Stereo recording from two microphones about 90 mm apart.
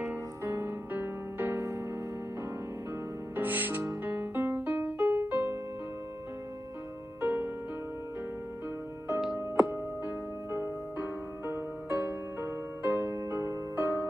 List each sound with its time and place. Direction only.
0.4 s music: 30° right (ahead or behind)
3.3 s music: 20° right (ahead or behind)
7.2 s music: 20° right (ahead or behind)
9.4 s music: 30° right (ahead or behind)